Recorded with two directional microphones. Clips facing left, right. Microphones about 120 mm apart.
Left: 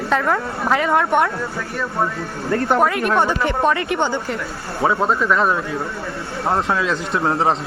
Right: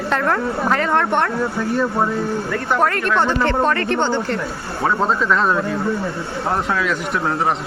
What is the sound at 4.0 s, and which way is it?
Speech, 25° right (ahead or behind).